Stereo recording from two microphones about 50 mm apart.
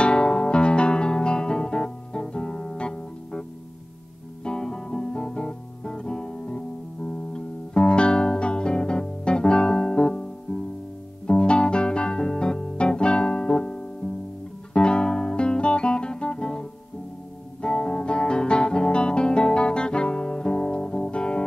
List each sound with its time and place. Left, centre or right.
0.0 s music: centre
4.5 s guitar: centre
11.2 s music: centre
14.7 s guitar: centre